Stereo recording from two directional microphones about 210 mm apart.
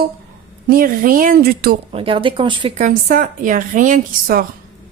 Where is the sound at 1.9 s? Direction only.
25° right (ahead or behind).